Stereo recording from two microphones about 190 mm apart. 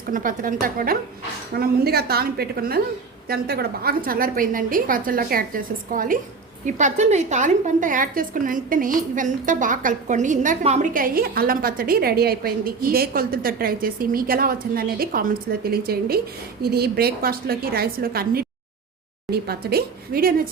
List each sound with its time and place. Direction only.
0.1 s a woman's voice: 45° right (ahead or behind)
10.9 s a woman's voice: 50° right (ahead or behind)